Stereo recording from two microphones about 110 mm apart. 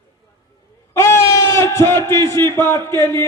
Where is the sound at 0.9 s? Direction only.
25° left (ahead or behind).